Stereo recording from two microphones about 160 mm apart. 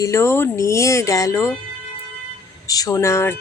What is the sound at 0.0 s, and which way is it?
Speech, 15° left (ahead or behind).